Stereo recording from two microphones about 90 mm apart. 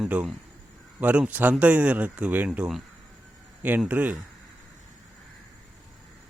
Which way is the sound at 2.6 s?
5° right (ahead or behind).